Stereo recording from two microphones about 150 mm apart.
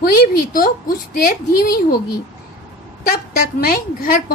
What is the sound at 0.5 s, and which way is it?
Speech, 75° left (ahead or behind).